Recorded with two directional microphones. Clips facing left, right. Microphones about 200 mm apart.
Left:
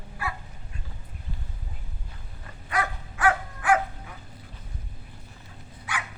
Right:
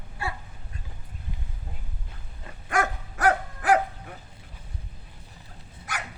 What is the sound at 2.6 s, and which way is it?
Dog, 45° right (ahead or behind).